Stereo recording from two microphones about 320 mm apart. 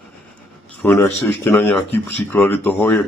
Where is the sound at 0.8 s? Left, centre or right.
Centre.